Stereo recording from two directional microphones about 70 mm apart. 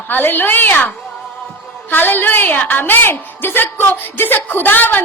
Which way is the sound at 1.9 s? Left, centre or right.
Left.